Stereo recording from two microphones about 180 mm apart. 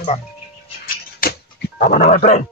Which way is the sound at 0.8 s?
60° left (ahead or behind).